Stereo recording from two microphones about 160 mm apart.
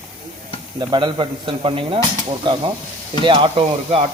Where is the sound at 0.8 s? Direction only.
30° right (ahead or behind).